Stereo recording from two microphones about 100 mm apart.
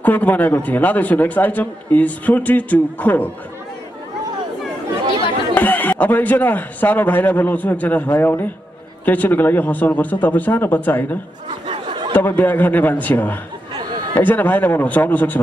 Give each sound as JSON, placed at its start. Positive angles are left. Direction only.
{"t": 0.0, "sound": "a man's voice", "side_deg": 15}
{"t": 5.5, "sound": "a man's voice", "side_deg": 20}
{"t": 11.6, "sound": "a sound", "side_deg": -60}
{"t": 12.1, "sound": "a man's voice", "side_deg": 20}